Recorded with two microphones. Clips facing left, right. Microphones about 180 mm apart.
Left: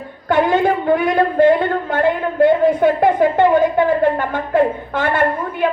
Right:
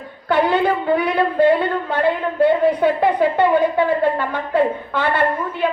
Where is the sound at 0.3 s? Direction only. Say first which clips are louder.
Left 2 dB; 45° left (ahead or behind).